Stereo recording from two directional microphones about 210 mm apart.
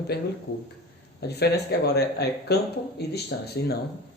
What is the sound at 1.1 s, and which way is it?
Speech, 50° left (ahead or behind).